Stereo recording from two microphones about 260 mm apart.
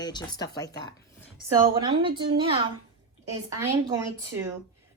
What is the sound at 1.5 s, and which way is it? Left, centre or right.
A woman's voice, centre.